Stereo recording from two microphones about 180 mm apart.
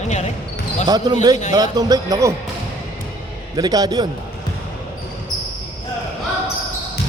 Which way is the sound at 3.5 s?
20° right (ahead or behind).